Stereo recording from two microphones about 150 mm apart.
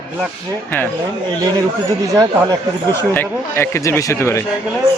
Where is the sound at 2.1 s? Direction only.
20° right (ahead or behind).